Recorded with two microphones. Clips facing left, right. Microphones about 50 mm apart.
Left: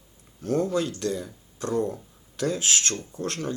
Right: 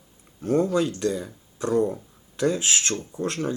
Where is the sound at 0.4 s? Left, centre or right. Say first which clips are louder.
Right 3 dB; right.